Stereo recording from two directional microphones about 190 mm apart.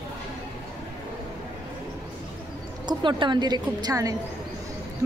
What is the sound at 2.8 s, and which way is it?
A woman's voice, 25° right (ahead or behind).